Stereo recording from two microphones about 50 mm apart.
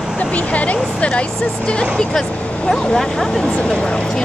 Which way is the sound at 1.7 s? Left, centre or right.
Centre.